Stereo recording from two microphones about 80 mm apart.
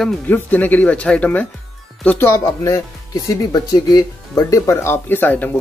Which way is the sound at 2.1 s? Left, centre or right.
Left.